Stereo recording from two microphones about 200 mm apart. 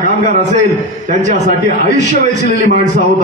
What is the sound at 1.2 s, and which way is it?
A man's voice, 35° right (ahead or behind).